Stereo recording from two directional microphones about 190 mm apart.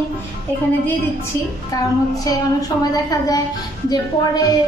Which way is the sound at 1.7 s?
20° left (ahead or behind).